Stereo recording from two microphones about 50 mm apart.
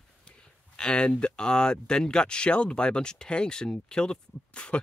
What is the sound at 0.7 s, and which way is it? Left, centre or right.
Speech, centre.